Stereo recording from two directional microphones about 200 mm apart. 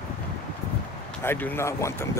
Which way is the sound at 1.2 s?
10° left (ahead or behind).